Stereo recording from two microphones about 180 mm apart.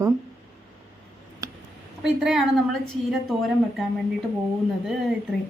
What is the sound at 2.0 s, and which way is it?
A woman's voice, centre (ahead or behind).